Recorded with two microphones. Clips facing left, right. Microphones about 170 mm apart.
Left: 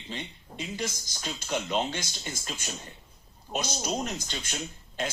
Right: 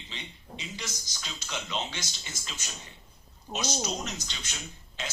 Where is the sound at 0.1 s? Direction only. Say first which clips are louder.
Left 6 dB; 50° left (ahead or behind).